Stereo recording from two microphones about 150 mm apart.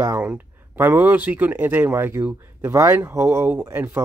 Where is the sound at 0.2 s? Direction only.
10° right (ahead or behind).